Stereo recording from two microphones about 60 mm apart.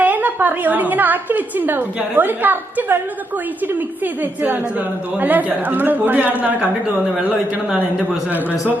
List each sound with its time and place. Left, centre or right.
0.0 s a woman's voice: right